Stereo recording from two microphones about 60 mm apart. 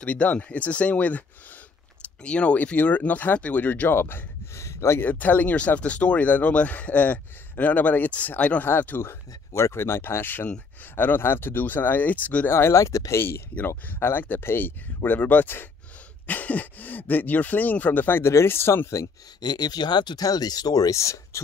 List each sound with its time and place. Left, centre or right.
0.0 s speech: left
2.2 s speech: centre
3.9 s speech: left
4.6 s gasp: left
5.0 s speech: left
8.6 s speech: left
9.5 s speech: left
12.4 s speech: left
12.7 s speech: left
13.7 s speech: left
19.5 s speech: left